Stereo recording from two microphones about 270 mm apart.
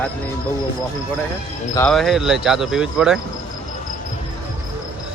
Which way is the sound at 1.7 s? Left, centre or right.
Centre.